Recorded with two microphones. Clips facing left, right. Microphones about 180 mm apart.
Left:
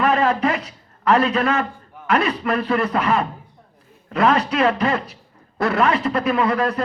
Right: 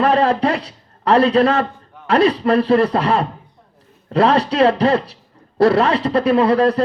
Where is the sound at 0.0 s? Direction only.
30° right (ahead or behind).